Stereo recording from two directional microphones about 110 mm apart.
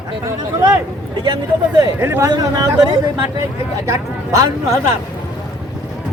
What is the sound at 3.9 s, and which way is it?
Speech, 30° right (ahead or behind).